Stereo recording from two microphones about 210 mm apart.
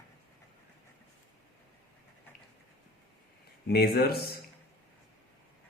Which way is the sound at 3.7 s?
45° left (ahead or behind).